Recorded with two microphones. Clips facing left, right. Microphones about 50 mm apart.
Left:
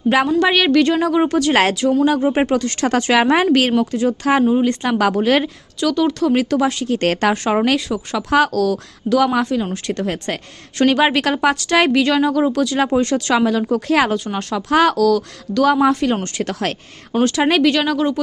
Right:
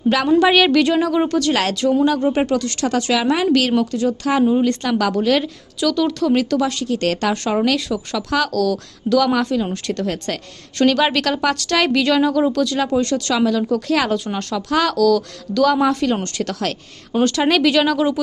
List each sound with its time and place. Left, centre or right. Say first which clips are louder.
0.3 s speech: right 2 dB; centre
1.1 s a woman's voice: left 2 dB; centre
2.4 s a woman's voice: left 2 dB; left
5.8 s a woman's voice: left 1 dB; centre
9.4 s a woman's voice: even; centre
12.8 s a woman's voice: left 2 dB; left
14.1 s a woman's voice: even; centre
14.5 s a woman's voice: left 4 dB; left
14.9 s a woman's voice: even; centre
17.2 s speech: left 1 dB; centre